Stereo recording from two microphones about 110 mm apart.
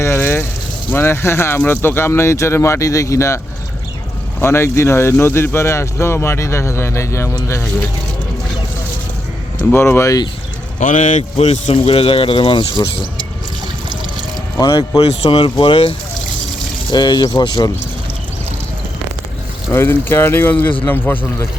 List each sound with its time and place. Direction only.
0.0 s vehicle: 20° left (ahead or behind)
0.9 s speech: 20° left (ahead or behind)
9.7 s speech: 25° left (ahead or behind)
10.8 s speech: 85° left
11.8 s speech: 60° left (ahead or behind)
15.0 s speech: 55° left (ahead or behind)
16.9 s speech: 40° left (ahead or behind)
19.7 s speech: 20° left (ahead or behind)